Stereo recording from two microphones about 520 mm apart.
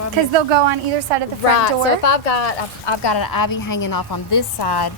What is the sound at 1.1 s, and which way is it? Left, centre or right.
Speech, right.